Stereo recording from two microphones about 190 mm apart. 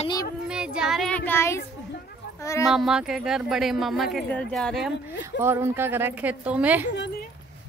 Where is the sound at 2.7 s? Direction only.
Centre (ahead or behind).